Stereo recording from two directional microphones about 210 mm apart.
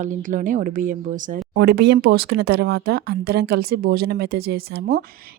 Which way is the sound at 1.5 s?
50° right (ahead or behind).